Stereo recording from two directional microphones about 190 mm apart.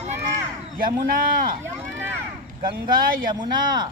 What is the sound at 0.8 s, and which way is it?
Speech, 45° right (ahead or behind).